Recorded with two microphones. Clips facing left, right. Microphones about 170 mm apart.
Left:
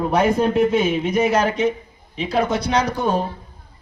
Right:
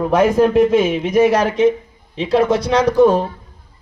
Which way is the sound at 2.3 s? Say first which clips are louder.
Right 5 dB; 90° right.